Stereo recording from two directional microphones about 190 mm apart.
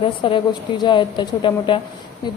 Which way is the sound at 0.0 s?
25° left (ahead or behind).